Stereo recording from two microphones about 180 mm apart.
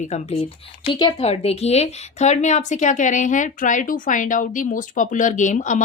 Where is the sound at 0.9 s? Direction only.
25° left (ahead or behind).